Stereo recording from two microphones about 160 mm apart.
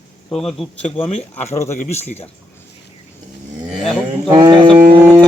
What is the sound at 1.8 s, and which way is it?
Speech, 45° left (ahead or behind).